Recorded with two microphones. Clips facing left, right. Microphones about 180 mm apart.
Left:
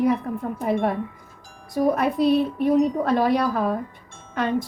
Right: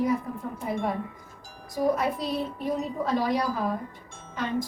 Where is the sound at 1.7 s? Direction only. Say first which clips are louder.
Left 5 dB; 65° left (ahead or behind).